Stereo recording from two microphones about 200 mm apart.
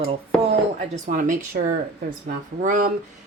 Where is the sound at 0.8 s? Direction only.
40° right (ahead or behind).